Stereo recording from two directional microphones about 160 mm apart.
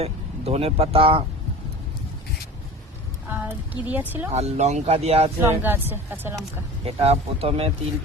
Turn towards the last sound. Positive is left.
turn(degrees=-40)  # may be behind; listen again after turning